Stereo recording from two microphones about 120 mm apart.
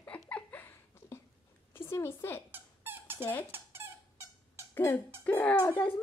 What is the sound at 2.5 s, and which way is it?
Squeak, 15° right (ahead or behind).